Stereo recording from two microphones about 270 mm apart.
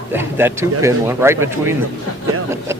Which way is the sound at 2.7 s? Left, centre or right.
Centre.